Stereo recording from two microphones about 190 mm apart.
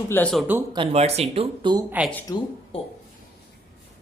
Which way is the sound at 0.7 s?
30° right (ahead or behind).